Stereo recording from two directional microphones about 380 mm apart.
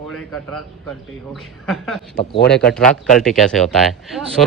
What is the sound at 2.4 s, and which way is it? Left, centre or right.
Speech, left.